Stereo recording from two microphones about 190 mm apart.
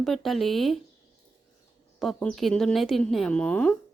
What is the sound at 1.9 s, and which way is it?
Speech, centre (ahead or behind).